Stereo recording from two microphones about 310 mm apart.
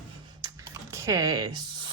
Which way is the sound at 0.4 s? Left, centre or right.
Centre.